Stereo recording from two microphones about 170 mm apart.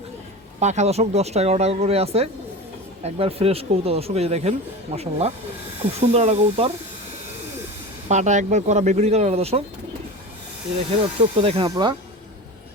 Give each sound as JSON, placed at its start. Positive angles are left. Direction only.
{"t": 0.6, "sound": "speech", "side_deg": -45}
{"t": 8.0, "sound": "speech", "side_deg": -45}
{"t": 11.4, "sound": "speech", "side_deg": -35}